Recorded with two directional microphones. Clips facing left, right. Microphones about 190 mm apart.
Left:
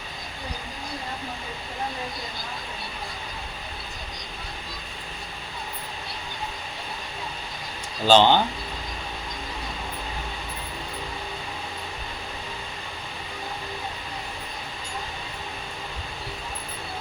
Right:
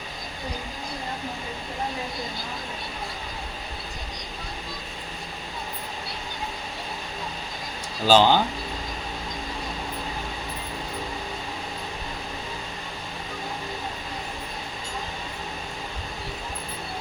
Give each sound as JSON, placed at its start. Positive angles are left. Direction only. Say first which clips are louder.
{"t": 8.0, "sound": "speech", "louder": "left 1 dB", "side_deg": -5}